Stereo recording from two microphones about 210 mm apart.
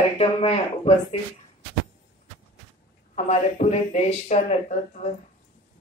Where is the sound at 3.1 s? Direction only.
35° left (ahead or behind).